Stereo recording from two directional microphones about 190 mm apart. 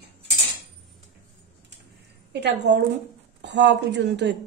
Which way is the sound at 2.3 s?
65° right (ahead or behind).